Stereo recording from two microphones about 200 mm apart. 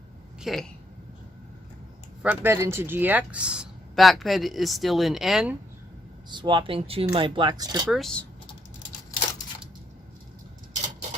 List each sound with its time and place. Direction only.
0.3 s speech: centre (ahead or behind)
2.2 s speech: 10° right (ahead or behind)
6.2 s speech: 25° right (ahead or behind)
7.9 s speech: centre (ahead or behind)